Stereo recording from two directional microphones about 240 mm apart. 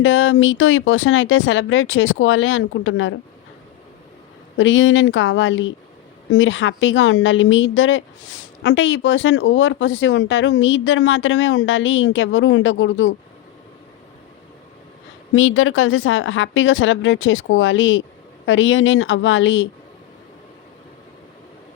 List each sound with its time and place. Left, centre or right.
0.0 s a woman's voice: left
4.5 s a woman's voice: left
15.4 s a woman's voice: left